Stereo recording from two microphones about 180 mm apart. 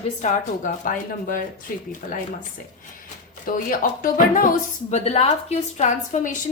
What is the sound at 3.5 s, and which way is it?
A woman's voice, 50° left (ahead or behind).